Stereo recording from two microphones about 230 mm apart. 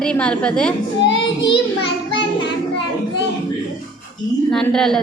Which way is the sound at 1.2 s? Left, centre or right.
Left.